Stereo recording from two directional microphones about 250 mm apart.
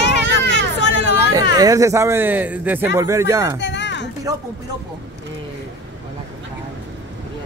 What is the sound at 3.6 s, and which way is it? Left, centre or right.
Music, left.